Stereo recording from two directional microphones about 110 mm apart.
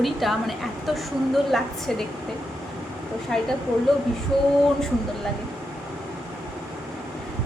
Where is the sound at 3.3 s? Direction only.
5° left (ahead or behind).